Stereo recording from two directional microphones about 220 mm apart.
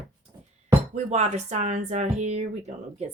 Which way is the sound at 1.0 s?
30° right (ahead or behind).